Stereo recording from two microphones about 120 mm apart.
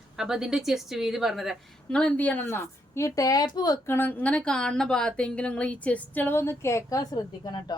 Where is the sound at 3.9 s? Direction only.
15° left (ahead or behind).